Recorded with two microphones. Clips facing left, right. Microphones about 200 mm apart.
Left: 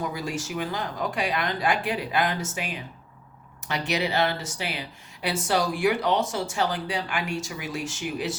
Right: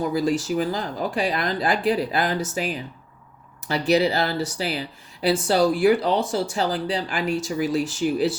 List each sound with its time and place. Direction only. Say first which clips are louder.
0.1 s speech: right 9 dB; 35° right (ahead or behind)